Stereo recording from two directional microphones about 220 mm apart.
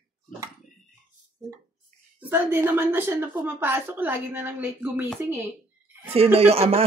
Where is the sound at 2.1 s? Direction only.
10° right (ahead or behind).